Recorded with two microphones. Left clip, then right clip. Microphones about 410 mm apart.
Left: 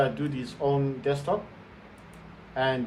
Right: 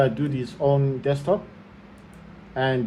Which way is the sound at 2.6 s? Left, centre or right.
Centre.